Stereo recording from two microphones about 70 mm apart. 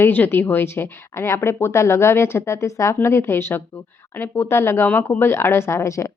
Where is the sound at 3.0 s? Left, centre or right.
Left.